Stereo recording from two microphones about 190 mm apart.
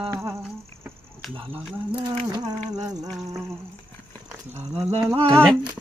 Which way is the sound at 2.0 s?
20° right (ahead or behind).